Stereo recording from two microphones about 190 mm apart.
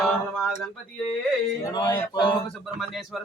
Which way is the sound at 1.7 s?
20° left (ahead or behind).